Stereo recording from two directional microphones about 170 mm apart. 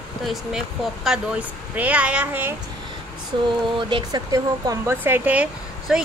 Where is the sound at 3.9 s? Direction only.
25° right (ahead or behind).